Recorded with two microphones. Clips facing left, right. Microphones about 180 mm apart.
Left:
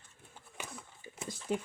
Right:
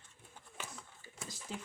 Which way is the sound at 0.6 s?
15° left (ahead or behind).